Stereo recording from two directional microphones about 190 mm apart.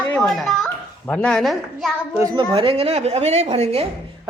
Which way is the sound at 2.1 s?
20° right (ahead or behind).